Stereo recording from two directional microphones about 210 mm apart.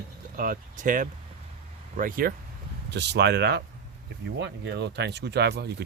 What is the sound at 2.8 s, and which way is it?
Speech, 55° right (ahead or behind).